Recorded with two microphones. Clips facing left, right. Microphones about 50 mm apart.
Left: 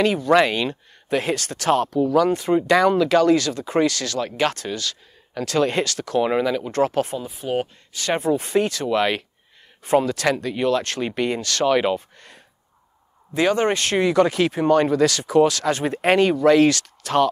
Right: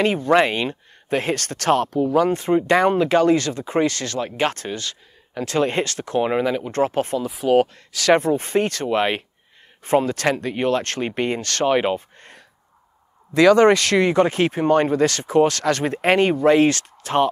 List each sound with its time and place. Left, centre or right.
0.0 s speech: right
7.2 s speech: right
8.2 s speech: right
13.3 s speech: right
14.0 s speech: right